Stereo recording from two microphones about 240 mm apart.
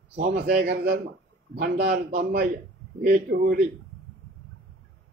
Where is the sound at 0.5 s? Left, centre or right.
Right.